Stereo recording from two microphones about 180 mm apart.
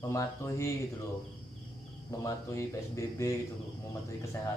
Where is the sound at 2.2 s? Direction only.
15° left (ahead or behind).